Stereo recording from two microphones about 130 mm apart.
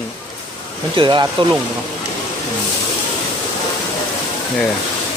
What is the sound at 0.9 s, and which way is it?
Speech, 35° right (ahead or behind).